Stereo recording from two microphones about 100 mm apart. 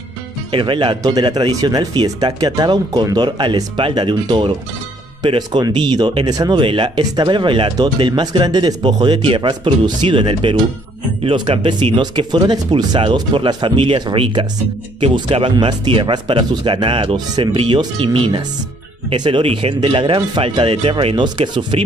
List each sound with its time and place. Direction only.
0.5 s speech: 55° right (ahead or behind)
6.6 s speech: 55° right (ahead or behind)